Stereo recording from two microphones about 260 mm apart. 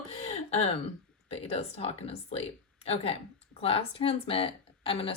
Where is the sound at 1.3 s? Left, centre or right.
Left.